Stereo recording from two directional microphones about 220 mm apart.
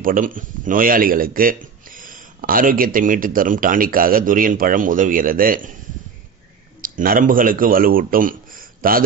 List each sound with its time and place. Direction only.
0.0 s speech: 40° right (ahead or behind)
6.8 s speech: 40° right (ahead or behind)